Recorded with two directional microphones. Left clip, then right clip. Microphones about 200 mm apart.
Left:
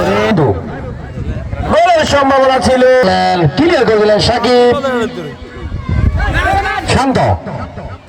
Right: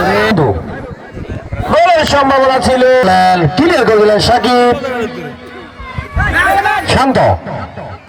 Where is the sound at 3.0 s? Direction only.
55° right (ahead or behind).